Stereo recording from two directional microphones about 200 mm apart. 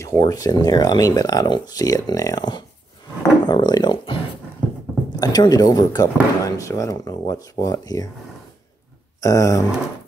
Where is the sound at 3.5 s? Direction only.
20° left (ahead or behind).